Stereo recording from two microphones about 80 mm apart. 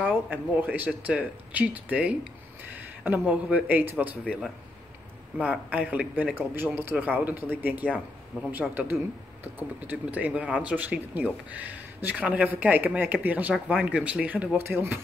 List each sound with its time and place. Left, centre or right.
0.0 s speech: right
2.7 s a sound: right
3.4 s speech: centre
5.4 s speech: centre
14.6 s speech: right